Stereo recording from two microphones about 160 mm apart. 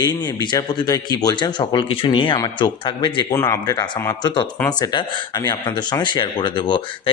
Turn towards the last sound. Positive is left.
turn(degrees=30)  # may be behind; listen again after turning